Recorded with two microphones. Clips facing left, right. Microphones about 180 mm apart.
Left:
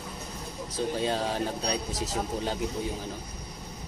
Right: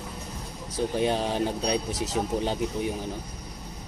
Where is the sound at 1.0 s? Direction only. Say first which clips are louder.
Right 5 dB; 20° right (ahead or behind).